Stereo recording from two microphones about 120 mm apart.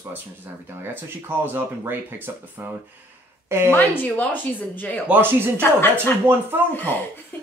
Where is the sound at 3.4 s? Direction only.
20° right (ahead or behind).